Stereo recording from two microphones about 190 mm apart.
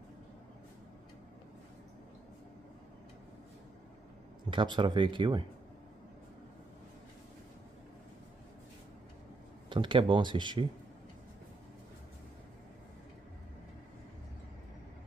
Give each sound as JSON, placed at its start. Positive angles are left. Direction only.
{"t": 4.5, "sound": "speech", "side_deg": -25}
{"t": 9.7, "sound": "speech", "side_deg": -25}